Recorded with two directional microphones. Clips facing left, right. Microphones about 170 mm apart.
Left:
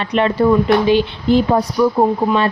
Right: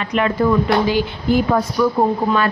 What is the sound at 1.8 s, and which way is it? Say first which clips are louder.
Speech: left 3 dB; 25° left (ahead or behind).